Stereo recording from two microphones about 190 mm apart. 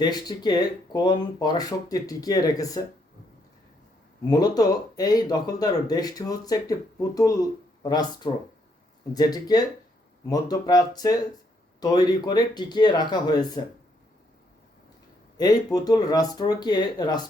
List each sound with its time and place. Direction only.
0.0 s speech: 20° left (ahead or behind)
4.3 s speech: 20° left (ahead or behind)
15.4 s speech: 20° left (ahead or behind)